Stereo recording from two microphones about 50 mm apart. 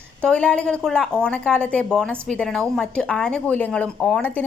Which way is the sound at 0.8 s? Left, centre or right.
Centre.